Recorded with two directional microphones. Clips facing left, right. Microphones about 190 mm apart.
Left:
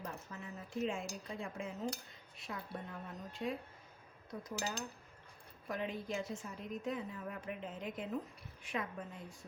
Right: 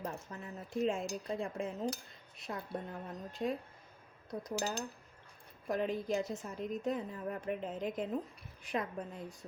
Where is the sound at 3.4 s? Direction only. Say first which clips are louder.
Right 4 dB; 40° right (ahead or behind).